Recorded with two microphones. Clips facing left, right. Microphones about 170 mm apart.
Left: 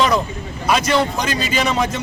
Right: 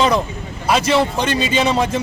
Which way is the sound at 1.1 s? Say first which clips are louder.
Right 3 dB; 30° right (ahead or behind).